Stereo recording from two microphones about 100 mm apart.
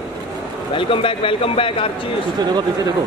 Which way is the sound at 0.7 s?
65° left (ahead or behind).